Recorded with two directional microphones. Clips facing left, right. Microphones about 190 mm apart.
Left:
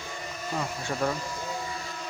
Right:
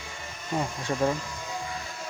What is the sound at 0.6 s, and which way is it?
Speech, 30° right (ahead or behind).